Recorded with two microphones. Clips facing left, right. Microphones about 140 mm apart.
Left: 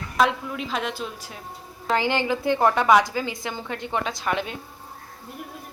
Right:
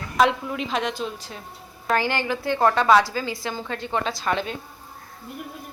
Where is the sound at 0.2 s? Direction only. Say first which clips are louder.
Right 2 dB; centre (ahead or behind).